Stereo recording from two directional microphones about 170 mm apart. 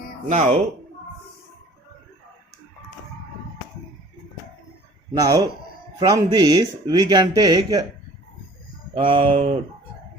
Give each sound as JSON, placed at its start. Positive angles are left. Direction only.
{"t": 0.3, "sound": "speech", "side_deg": -45}
{"t": 5.1, "sound": "speech", "side_deg": -20}
{"t": 9.0, "sound": "speech", "side_deg": -30}